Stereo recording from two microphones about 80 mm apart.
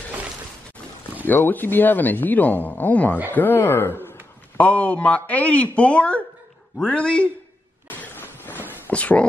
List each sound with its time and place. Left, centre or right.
1.2 s speech: left
4.6 s a man's voice: centre
7.9 s a sound: left